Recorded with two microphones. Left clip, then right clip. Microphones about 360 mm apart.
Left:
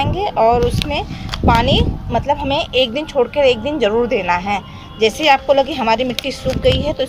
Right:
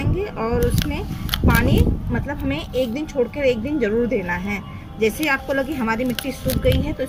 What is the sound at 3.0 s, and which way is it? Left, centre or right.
A woman's voice, left.